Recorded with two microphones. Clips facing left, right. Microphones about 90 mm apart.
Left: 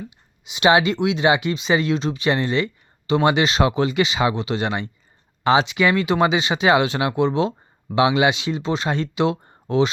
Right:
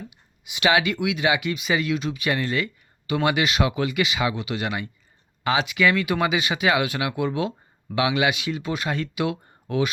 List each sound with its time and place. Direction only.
0.4 s speech: 25° left (ahead or behind)